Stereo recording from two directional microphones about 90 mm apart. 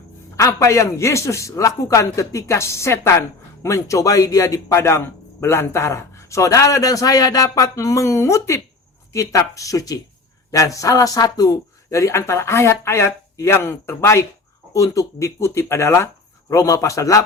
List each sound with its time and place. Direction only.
0.3 s a man's voice: 35° left (ahead or behind)